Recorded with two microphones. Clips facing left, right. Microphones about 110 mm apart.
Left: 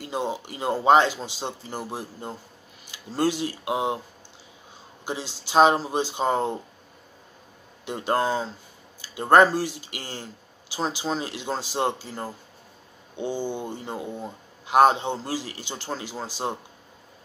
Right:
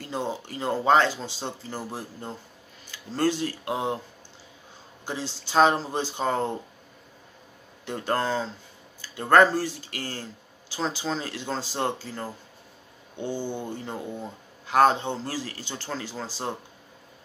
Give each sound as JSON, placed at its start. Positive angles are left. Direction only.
{"t": 0.0, "sound": "speech", "side_deg": 15}
{"t": 5.0, "sound": "speech", "side_deg": 15}
{"t": 7.8, "sound": "speech", "side_deg": 15}